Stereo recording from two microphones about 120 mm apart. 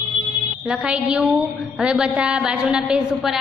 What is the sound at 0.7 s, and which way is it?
A woman's voice, 10° right (ahead or behind).